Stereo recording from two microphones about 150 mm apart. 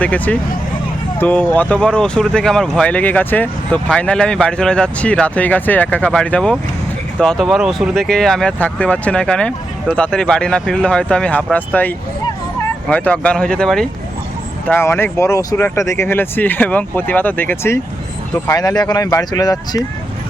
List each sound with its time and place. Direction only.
0.0 s speech: 10° left (ahead or behind)
14.7 s speech: 15° left (ahead or behind)